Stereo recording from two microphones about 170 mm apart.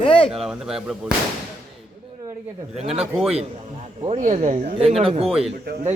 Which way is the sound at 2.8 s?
35° right (ahead or behind).